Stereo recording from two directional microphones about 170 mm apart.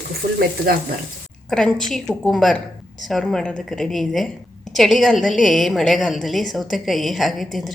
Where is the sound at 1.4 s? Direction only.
5° left (ahead or behind).